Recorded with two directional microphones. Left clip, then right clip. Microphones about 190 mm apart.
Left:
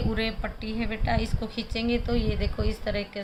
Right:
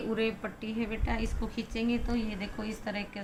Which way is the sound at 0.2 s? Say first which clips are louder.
Left 2 dB; 40° left (ahead or behind).